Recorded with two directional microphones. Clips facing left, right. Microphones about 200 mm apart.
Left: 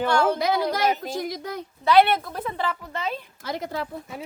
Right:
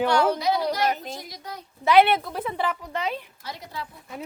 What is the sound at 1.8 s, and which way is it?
A woman's voice, 15° right (ahead or behind).